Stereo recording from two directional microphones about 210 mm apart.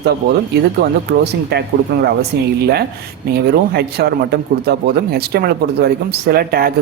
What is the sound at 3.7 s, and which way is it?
Speech, 50° right (ahead or behind).